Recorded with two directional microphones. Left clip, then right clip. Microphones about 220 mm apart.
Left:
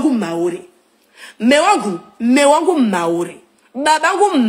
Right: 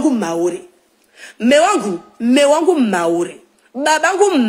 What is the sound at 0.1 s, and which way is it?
Speech, 35° left (ahead or behind).